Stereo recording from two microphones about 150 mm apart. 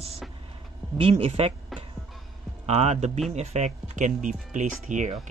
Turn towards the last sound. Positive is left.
turn(degrees=-55)  # may be behind; listen again after turning